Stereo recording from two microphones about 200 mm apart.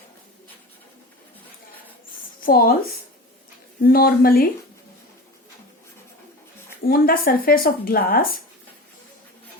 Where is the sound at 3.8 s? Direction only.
50° left (ahead or behind).